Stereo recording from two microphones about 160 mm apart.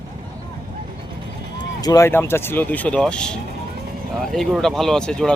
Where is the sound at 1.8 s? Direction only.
20° left (ahead or behind).